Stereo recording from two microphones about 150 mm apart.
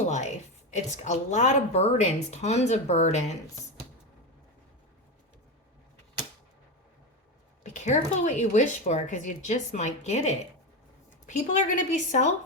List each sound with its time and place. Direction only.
0.0 s a sound: 50° left (ahead or behind)
0.7 s a woman's voice: 55° left (ahead or behind)
7.6 s a woman's voice: 55° left (ahead or behind)